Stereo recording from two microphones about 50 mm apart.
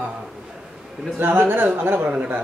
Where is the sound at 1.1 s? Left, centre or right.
Right.